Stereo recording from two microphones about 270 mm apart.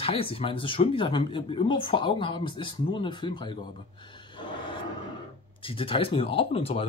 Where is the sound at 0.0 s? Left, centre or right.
Left.